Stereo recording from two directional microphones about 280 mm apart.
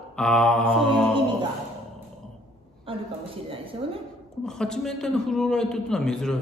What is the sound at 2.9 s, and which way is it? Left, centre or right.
Speech, centre.